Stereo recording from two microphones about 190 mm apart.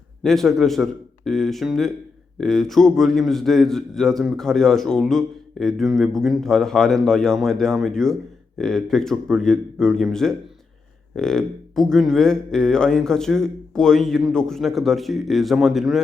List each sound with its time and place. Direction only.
0.2 s a man's voice: centre (ahead or behind)